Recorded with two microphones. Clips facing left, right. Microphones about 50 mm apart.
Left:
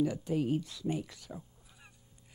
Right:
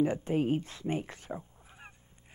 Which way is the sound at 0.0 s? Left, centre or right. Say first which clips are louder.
Right 3 dB; right.